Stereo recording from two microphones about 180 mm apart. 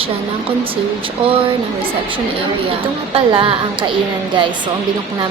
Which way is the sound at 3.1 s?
30° right (ahead or behind).